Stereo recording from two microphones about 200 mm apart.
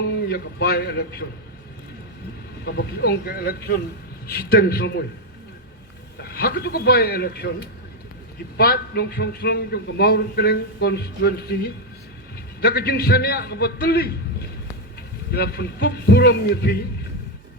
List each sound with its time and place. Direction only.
0.3 s a man's voice: 50° left (ahead or behind)
2.6 s a man's voice: 55° left (ahead or behind)
6.1 s a man's voice: 55° left (ahead or behind)
12.6 s a man's voice: 50° left (ahead or behind)
15.3 s a man's voice: 50° left (ahead or behind)